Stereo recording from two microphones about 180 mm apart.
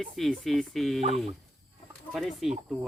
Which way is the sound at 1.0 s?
35° right (ahead or behind).